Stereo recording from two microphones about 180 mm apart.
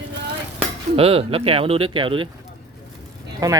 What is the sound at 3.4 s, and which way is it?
Speech, 20° right (ahead or behind).